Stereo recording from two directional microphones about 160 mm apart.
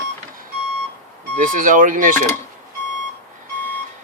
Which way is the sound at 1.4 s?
55° right (ahead or behind).